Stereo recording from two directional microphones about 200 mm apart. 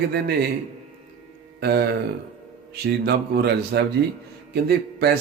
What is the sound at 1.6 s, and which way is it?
A man's voice, 55° right (ahead or behind).